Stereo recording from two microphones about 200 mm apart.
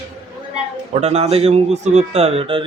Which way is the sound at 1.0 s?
30° right (ahead or behind).